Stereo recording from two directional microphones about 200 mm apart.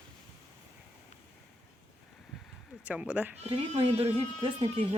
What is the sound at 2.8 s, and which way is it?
Speech, 5° right (ahead or behind).